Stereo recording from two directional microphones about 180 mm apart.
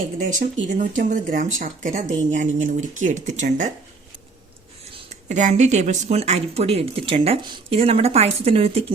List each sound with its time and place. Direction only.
0.2 s speech: 45° right (ahead or behind)
5.0 s speech: 40° right (ahead or behind)